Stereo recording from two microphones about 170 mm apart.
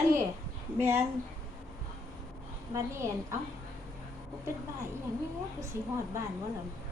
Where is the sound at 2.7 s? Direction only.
15° right (ahead or behind).